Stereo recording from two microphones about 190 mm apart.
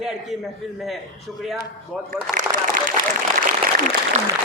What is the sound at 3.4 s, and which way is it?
Applause, 45° right (ahead or behind).